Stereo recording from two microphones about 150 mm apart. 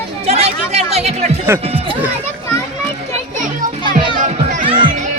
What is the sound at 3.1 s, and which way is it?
Music, 60° right (ahead or behind).